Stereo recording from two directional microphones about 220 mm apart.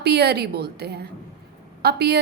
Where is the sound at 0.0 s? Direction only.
50° right (ahead or behind).